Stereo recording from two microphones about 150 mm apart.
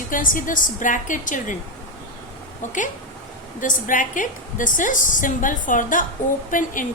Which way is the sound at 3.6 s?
60° left (ahead or behind).